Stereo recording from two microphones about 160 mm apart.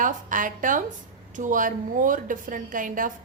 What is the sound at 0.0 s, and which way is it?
A woman's voice, 55° right (ahead or behind).